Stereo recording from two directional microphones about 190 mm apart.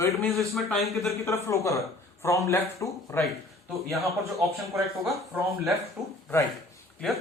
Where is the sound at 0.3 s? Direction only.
Centre (ahead or behind).